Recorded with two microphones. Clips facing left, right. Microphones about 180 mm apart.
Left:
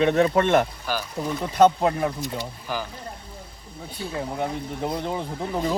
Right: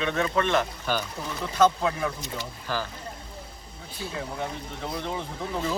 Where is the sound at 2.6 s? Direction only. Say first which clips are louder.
Right 1 dB; 15° left (ahead or behind).